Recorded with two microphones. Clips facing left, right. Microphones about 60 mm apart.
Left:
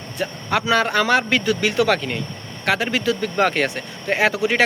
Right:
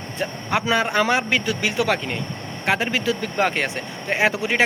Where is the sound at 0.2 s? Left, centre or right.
Right.